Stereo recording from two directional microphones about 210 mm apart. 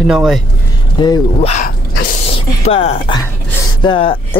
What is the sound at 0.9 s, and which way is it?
Speech, 20° left (ahead or behind).